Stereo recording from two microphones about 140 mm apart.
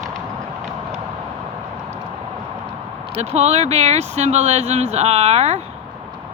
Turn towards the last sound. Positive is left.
turn(degrees=-50)  # may be behind; listen again after turning